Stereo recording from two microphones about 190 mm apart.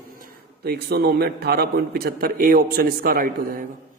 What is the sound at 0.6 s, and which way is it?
A man's voice, 55° right (ahead or behind).